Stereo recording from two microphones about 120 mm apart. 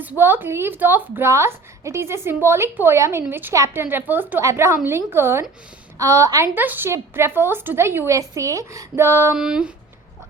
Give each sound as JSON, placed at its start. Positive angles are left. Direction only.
{"t": 0.0, "sound": "a woman's voice", "side_deg": -15}
{"t": 9.3, "sound": "speech", "side_deg": -5}